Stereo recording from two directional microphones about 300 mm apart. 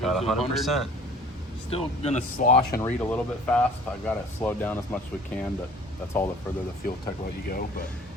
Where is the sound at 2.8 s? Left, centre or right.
Centre.